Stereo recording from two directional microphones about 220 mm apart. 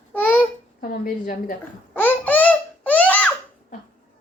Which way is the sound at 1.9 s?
10° left (ahead or behind).